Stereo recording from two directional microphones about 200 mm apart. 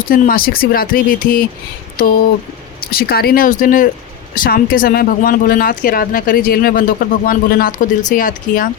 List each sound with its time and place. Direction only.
0.1 s speech: 45° left (ahead or behind)